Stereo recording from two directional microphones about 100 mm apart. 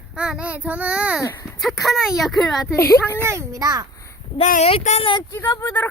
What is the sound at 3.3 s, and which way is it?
Speech, 35° right (ahead or behind).